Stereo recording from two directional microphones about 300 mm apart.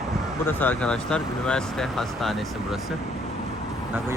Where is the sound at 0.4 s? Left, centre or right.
Centre.